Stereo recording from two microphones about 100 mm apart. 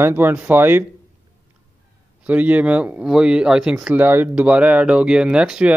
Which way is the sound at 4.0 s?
20° right (ahead or behind).